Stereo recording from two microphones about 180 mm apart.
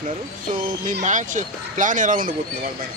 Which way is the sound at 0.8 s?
45° right (ahead or behind).